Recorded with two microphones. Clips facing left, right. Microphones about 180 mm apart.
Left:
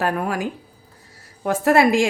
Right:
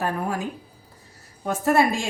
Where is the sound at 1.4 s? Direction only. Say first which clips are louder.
Left 4 dB; 90° left.